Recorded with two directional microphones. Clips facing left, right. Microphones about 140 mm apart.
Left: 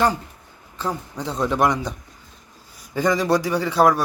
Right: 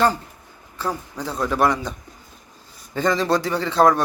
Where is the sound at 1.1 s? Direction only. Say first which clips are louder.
Left 3 dB; 20° left (ahead or behind).